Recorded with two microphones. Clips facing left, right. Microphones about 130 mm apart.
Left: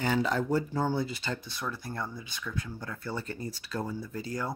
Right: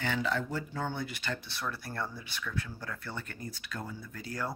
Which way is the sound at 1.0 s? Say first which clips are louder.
Left 4 dB; 20° left (ahead or behind).